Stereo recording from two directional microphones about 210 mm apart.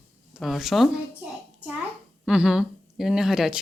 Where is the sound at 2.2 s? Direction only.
5° right (ahead or behind).